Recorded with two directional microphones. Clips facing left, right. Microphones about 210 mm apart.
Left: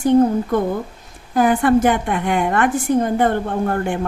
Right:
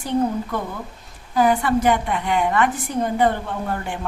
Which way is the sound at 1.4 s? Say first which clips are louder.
Left 4 dB; 50° left (ahead or behind).